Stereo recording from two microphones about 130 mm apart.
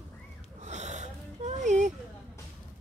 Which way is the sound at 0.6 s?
65° right (ahead or behind).